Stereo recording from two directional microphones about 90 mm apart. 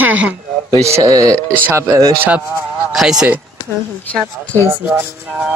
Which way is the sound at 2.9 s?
5° right (ahead or behind).